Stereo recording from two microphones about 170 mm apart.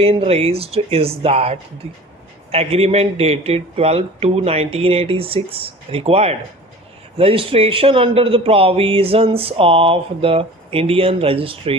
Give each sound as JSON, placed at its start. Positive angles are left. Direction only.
{"t": 0.0, "sound": "a man's voice", "side_deg": -35}